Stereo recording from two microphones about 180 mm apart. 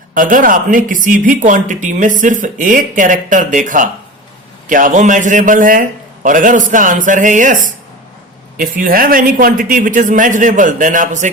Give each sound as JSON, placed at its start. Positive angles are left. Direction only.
{"t": 0.1, "sound": "a woman's voice", "side_deg": -50}